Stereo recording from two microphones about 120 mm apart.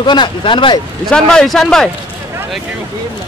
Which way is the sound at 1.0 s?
5° left (ahead or behind).